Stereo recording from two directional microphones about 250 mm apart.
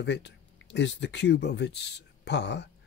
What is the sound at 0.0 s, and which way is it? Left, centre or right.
Speech, left.